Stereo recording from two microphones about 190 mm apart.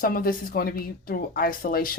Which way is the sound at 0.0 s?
50° left (ahead or behind).